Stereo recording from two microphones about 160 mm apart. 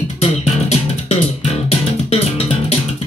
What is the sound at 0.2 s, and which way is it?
Music, 40° left (ahead or behind).